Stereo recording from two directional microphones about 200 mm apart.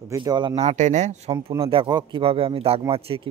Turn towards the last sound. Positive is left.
turn(degrees=-25)  # may be behind; listen again after turning